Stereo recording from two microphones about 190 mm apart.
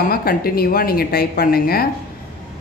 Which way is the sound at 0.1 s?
50° left (ahead or behind).